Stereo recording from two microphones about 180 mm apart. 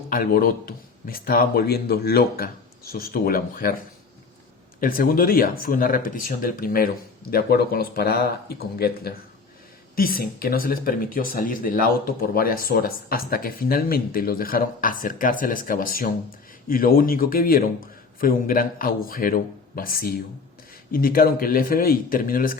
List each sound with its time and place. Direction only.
0.1 s speech: 55° left (ahead or behind)
4.8 s speech: 50° left (ahead or behind)